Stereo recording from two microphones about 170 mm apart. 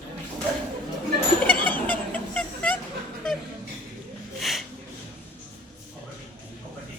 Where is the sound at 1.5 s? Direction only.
10° left (ahead or behind).